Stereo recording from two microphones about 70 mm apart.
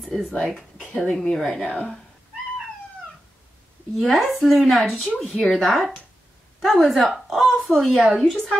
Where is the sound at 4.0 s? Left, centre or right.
Centre.